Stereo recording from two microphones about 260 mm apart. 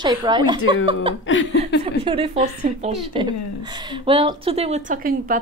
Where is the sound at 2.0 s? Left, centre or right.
Centre.